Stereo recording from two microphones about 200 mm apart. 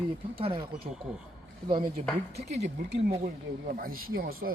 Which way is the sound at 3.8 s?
45° right (ahead or behind).